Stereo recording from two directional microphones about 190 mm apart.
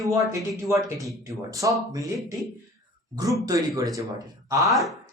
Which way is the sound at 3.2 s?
15° right (ahead or behind).